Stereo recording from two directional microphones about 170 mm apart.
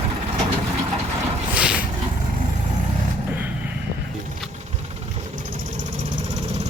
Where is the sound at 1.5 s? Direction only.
10° right (ahead or behind).